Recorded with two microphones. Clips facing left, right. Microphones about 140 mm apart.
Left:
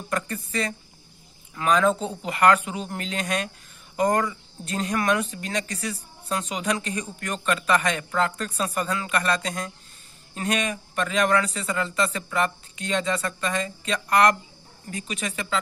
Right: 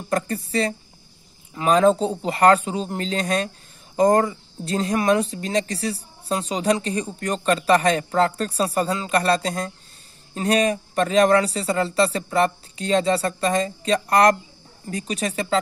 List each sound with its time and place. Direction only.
0.1 s speech: 35° right (ahead or behind)